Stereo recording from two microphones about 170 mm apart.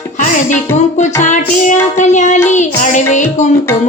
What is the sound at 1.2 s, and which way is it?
Music, 45° left (ahead or behind).